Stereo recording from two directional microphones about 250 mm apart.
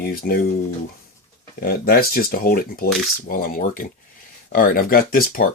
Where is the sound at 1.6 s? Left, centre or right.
Left.